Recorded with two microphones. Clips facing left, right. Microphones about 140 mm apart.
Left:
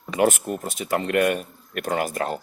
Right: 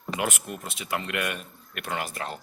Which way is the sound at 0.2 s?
40° left (ahead or behind).